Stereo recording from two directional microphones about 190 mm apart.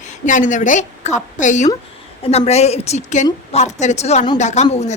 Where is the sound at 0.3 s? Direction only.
40° left (ahead or behind).